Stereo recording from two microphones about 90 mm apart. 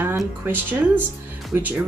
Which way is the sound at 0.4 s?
20° right (ahead or behind).